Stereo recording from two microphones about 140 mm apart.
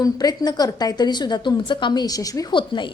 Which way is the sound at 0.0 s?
30° left (ahead or behind).